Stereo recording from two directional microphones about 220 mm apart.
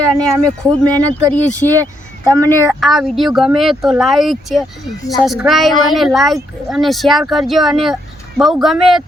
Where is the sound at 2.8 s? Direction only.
Centre (ahead or behind).